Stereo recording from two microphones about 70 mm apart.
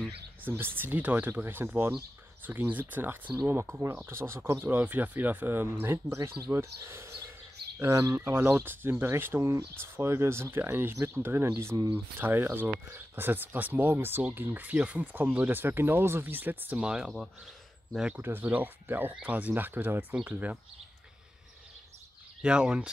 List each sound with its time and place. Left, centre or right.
0.4 s speech: right
8.5 s speech: right
16.8 s speech: centre
18.2 s speech: right
22.4 s speech: centre